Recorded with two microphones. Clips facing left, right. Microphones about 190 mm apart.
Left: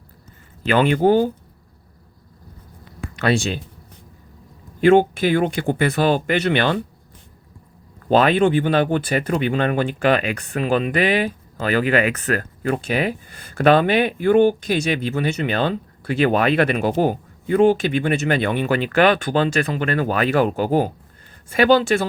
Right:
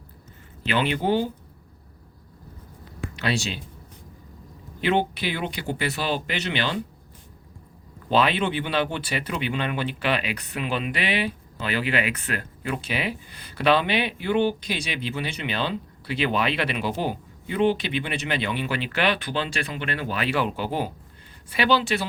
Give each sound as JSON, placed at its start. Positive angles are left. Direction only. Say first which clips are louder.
{"t": 0.6, "sound": "speech", "louder": "left 8 dB", "side_deg": 50}
{"t": 3.2, "sound": "speech", "louder": "left 7 dB", "side_deg": 50}
{"t": 4.8, "sound": "speech", "louder": "left 10 dB", "side_deg": 45}
{"t": 8.1, "sound": "speech", "louder": "left 7 dB", "side_deg": 45}